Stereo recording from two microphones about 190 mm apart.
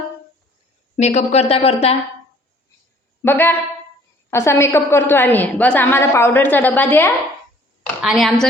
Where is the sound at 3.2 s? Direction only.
10° left (ahead or behind).